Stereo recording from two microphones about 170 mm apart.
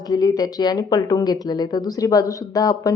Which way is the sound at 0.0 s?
20° left (ahead or behind).